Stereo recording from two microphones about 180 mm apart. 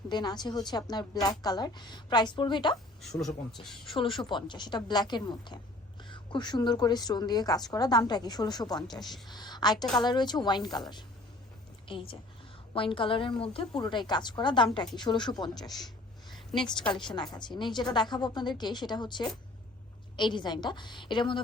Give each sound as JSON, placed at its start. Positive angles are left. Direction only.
{"t": 0.1, "sound": "a woman's voice", "side_deg": 25}
{"t": 3.0, "sound": "speech", "side_deg": 0}
{"t": 3.8, "sound": "a woman's voice", "side_deg": 30}
{"t": 16.3, "sound": "a sound", "side_deg": 0}
{"t": 16.6, "sound": "a woman's voice", "side_deg": 25}